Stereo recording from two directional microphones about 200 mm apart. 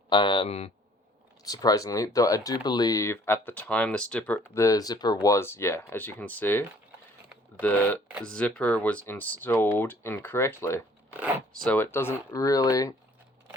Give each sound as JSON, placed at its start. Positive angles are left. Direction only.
{"t": 0.1, "sound": "speech", "side_deg": 25}
{"t": 1.5, "sound": "speech", "side_deg": 20}